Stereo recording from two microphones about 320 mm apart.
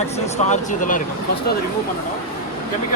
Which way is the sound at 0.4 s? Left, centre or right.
Left.